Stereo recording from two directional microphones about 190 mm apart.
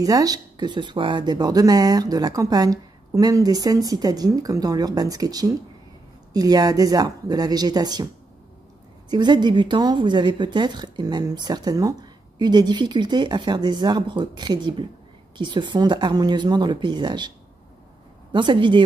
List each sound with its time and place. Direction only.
0.0 s speech: 20° right (ahead or behind)
9.1 s speech: 25° right (ahead or behind)
18.3 s speech: 25° right (ahead or behind)